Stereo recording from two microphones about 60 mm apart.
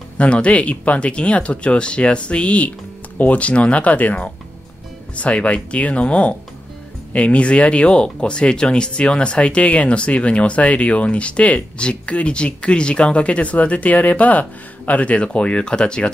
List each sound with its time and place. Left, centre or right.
0.2 s speech: centre